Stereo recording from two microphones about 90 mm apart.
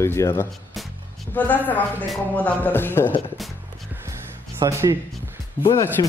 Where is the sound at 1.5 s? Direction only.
20° left (ahead or behind).